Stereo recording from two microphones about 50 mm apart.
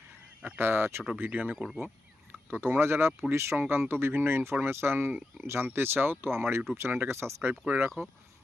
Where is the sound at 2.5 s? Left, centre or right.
Right.